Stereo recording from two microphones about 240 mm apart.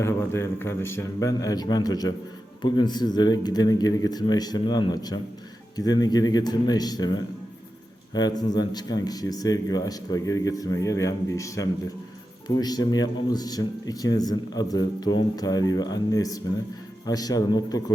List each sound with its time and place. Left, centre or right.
0.0 s a man's voice: centre